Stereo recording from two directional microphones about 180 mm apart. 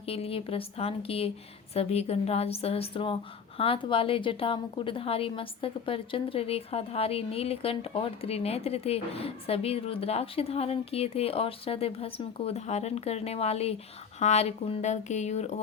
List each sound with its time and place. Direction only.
0.0 s a woman's voice: 30° left (ahead or behind)